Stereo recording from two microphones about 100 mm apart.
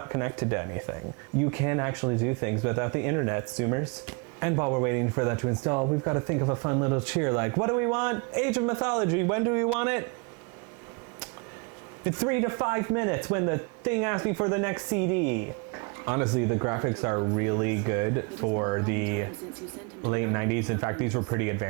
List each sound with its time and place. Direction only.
0.0 s speech: 30° right (ahead or behind)
12.0 s speech: 25° right (ahead or behind)